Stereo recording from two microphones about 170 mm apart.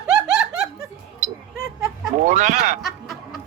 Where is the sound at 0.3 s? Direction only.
5° right (ahead or behind).